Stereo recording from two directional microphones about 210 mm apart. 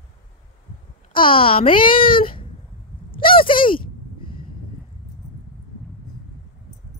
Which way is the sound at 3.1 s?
25° left (ahead or behind).